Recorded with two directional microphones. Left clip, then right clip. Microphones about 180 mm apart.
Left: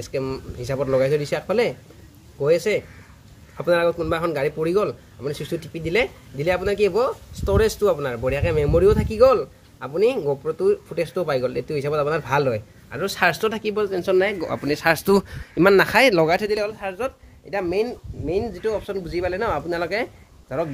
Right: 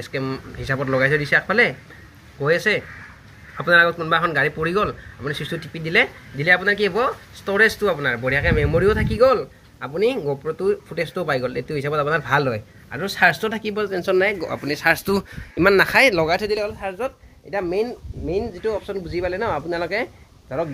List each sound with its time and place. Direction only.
0.0 s a man's voice: 10° left (ahead or behind)
3.8 s a man's voice: 10° left (ahead or behind)
6.9 s speech: 10° right (ahead or behind)
7.4 s a man's voice: 10° left (ahead or behind)
10.4 s speech: 5° right (ahead or behind)
11.2 s a man's voice: 15° left (ahead or behind)
14.4 s speech: 45° left (ahead or behind)
15.5 s speech: 35° left (ahead or behind)
16.4 s a man's voice: 20° left (ahead or behind)
16.8 s speech: 10° right (ahead or behind)